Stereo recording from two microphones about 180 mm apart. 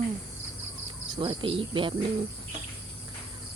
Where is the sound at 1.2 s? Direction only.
30° right (ahead or behind).